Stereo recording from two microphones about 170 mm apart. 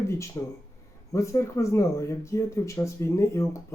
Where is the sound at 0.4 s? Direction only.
20° left (ahead or behind).